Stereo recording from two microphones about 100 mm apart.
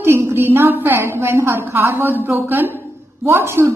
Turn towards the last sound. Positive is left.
turn(degrees=-25)  # may be behind; listen again after turning